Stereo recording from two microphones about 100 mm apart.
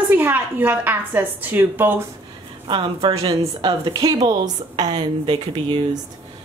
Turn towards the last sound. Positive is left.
turn(degrees=-45)  # may be behind; listen again after turning